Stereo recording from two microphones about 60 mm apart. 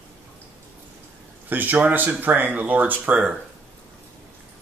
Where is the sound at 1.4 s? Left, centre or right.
Right.